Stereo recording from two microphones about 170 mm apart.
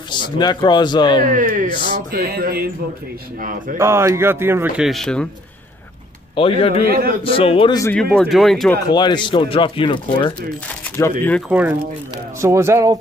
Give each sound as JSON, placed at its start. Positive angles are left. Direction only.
{"t": 0.1, "sound": "speech", "side_deg": 25}
{"t": 1.2, "sound": "speech", "side_deg": -50}
{"t": 2.1, "sound": "a sound", "side_deg": -60}
{"t": 3.3, "sound": "speech", "side_deg": -50}
{"t": 3.7, "sound": "speech", "side_deg": -15}
{"t": 4.8, "sound": "speech", "side_deg": 0}
{"t": 6.4, "sound": "a man's voice", "side_deg": 30}
{"t": 6.8, "sound": "a sound", "side_deg": -60}
{"t": 7.2, "sound": "a man's voice", "side_deg": 35}
{"t": 7.8, "sound": "speech", "side_deg": 5}
{"t": 8.8, "sound": "speech", "side_deg": 25}
{"t": 11.0, "sound": "speech", "side_deg": 10}
{"t": 11.4, "sound": "speech", "side_deg": -5}